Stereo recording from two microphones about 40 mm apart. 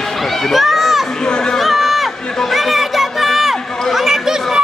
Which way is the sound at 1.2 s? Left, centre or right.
Centre.